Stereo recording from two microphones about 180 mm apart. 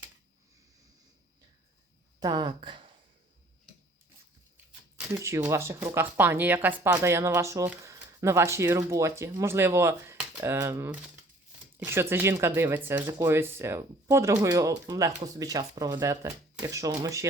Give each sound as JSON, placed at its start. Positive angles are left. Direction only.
{"t": 2.2, "sound": "speech", "side_deg": -25}
{"t": 4.5, "sound": "speech", "side_deg": -10}